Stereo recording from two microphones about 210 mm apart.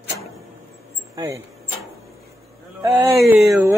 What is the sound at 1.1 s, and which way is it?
Speech, 15° right (ahead or behind).